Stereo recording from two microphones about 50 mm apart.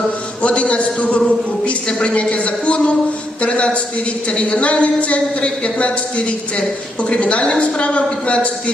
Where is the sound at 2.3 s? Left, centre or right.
Left.